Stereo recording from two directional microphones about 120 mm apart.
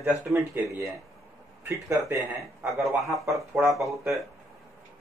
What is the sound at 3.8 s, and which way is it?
Speech, 25° right (ahead or behind).